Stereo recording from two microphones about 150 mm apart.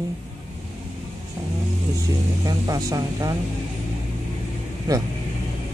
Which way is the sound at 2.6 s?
20° right (ahead or behind).